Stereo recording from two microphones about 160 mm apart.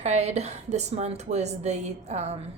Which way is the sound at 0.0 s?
45° right (ahead or behind).